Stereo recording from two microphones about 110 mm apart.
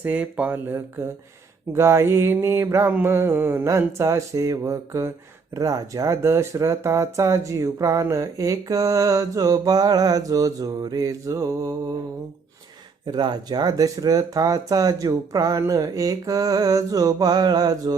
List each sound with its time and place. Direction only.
0.0 s speech: 15° right (ahead or behind)
1.7 s a sound: 25° right (ahead or behind)
5.5 s speech: 30° right (ahead or behind)
13.1 s speech: 40° right (ahead or behind)